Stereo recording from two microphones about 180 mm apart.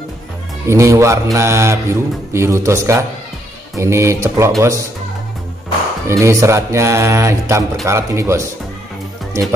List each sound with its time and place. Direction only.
0.7 s speech: 15° right (ahead or behind)
6.0 s speech: 15° right (ahead or behind)